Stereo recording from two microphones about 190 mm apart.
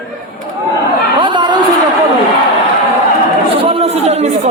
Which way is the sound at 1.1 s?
25° right (ahead or behind).